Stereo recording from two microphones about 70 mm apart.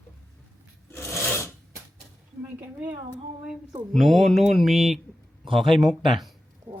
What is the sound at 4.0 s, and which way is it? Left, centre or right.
Speech, centre.